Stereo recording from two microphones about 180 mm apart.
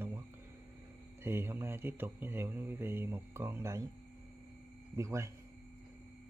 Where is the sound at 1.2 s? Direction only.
15° right (ahead or behind).